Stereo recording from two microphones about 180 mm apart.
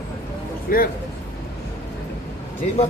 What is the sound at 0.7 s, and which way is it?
Speech, 50° left (ahead or behind).